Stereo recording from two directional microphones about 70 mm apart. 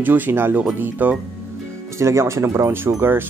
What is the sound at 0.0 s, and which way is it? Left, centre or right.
Speech, right.